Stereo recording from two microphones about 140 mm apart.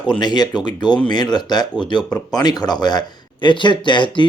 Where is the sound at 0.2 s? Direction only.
30° left (ahead or behind).